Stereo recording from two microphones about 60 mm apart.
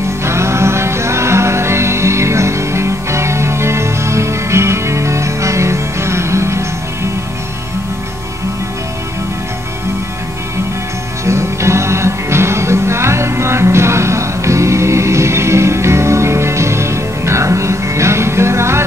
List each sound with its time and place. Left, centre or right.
0.2 s music: right
11.2 s music: right